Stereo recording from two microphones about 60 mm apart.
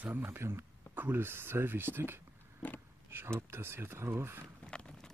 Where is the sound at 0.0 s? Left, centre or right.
Right.